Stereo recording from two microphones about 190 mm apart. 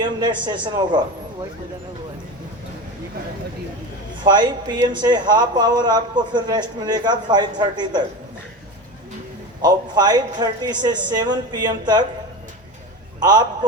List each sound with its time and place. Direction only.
0.0 s speech: 25° right (ahead or behind)
4.2 s speech: 20° right (ahead or behind)
9.6 s speech: 20° right (ahead or behind)
13.1 s a man's voice: 20° right (ahead or behind)